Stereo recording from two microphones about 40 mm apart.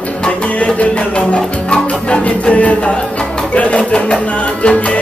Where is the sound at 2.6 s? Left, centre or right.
Left.